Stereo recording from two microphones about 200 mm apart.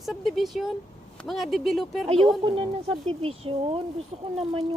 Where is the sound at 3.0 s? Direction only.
25° right (ahead or behind).